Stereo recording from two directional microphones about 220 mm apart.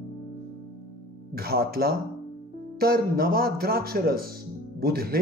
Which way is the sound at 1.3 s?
45° right (ahead or behind).